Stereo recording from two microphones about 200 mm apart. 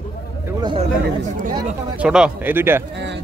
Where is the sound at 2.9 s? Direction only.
60° right (ahead or behind).